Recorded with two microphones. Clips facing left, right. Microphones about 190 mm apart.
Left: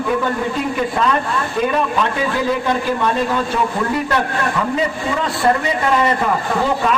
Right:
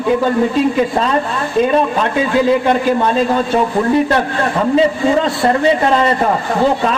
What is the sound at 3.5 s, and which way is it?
Speech, 25° right (ahead or behind).